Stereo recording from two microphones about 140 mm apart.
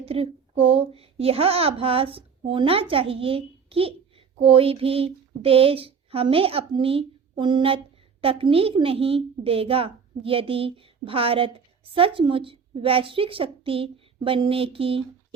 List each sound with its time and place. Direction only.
0.0 s a woman's voice: 45° right (ahead or behind)